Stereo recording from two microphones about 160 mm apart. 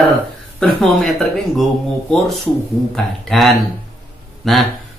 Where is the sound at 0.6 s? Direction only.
Centre (ahead or behind).